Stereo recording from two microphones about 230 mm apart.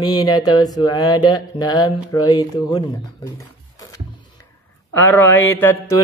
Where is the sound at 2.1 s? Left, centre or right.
Centre.